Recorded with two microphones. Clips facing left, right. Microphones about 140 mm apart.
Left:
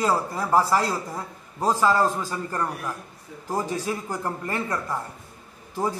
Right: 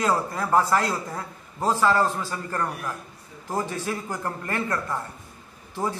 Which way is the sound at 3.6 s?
40° left (ahead or behind).